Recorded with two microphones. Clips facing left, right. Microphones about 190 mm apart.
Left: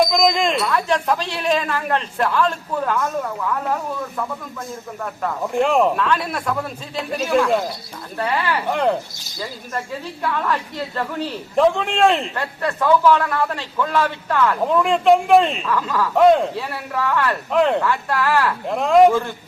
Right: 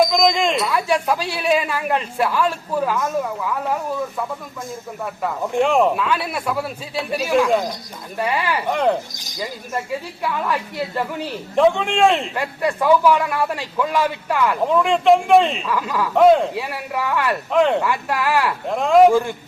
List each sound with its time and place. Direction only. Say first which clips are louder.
0.0 s speech: right 1 dB; centre (ahead or behind)
5.2 s a man's voice: even; centre (ahead or behind)
8.2 s speech: even; 15° right (ahead or behind)
8.6 s a man's voice: right 2 dB; centre (ahead or behind)
9.1 s speech: right 2 dB; 15° right (ahead or behind)
11.5 s a man's voice: right 1 dB; centre (ahead or behind)
12.3 s speech: right 2 dB; 10° right (ahead or behind)
14.7 s a man's voice: right 1 dB; centre (ahead or behind)
15.7 s speech: left 1 dB; 15° right (ahead or behind)
16.1 s a man's voice: right 1 dB; centre (ahead or behind)
16.6 s speech: even; 15° right (ahead or behind)
17.5 s a man's voice: right 1 dB; centre (ahead or behind)
17.8 s speech: left 1 dB; 15° right (ahead or behind)
18.7 s a man's voice: even; centre (ahead or behind)